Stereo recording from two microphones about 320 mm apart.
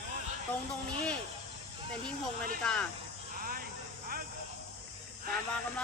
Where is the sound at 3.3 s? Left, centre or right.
Right.